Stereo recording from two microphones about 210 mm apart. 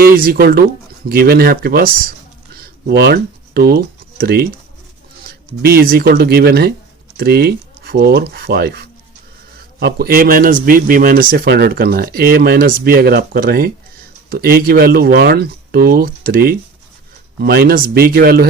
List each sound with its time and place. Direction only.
0.0 s speech: 45° right (ahead or behind)
2.6 s a sound: 50° right (ahead or behind)
5.6 s speech: 45° right (ahead or behind)
9.8 s speech: 45° right (ahead or behind)